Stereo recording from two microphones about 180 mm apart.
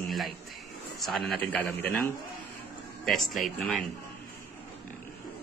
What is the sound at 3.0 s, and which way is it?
Speech, centre (ahead or behind).